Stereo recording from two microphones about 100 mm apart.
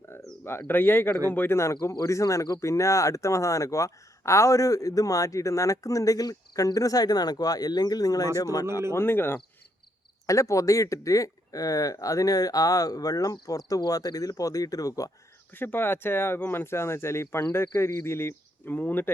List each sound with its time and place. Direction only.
0.7 s speech: 20° left (ahead or behind); by 8.3 s 40° left (ahead or behind)
9.0 s speech: 20° left (ahead or behind)
10.2 s speech: 35° left (ahead or behind)
15.5 s speech: 20° left (ahead or behind)